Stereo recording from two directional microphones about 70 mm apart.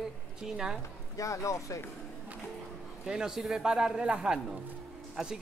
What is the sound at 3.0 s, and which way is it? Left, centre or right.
Speech, centre.